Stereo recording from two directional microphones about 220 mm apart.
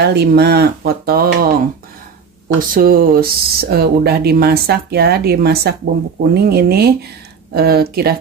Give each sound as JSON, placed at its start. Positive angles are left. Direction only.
{"t": 0.0, "sound": "speech", "side_deg": -50}
{"t": 2.7, "sound": "speech", "side_deg": -40}